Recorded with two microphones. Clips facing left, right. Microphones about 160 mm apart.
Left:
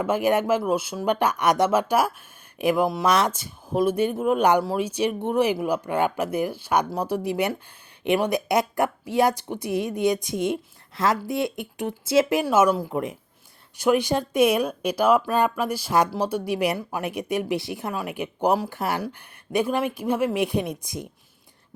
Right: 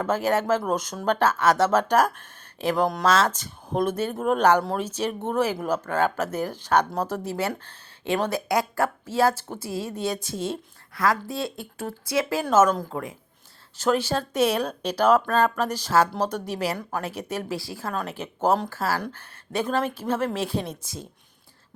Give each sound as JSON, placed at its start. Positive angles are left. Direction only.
{"t": 0.0, "sound": "speech", "side_deg": 15}
{"t": 3.1, "sound": "speech", "side_deg": 15}